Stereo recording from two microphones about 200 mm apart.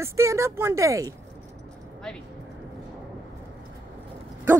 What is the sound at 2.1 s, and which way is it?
Speech, centre (ahead or behind).